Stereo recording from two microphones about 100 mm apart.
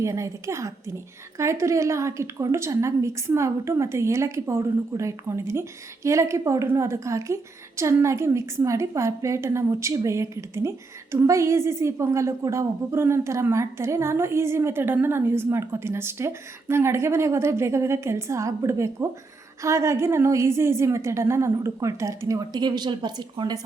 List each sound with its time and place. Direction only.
0.0 s a woman's voice: 30° right (ahead or behind); by 23.6 s 45° right (ahead or behind)